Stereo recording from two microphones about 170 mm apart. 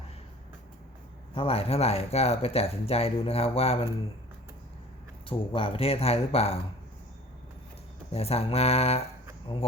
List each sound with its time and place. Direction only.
1.4 s speech: 35° left (ahead or behind)
5.3 s speech: 30° left (ahead or behind)
8.1 s speech: 35° left (ahead or behind)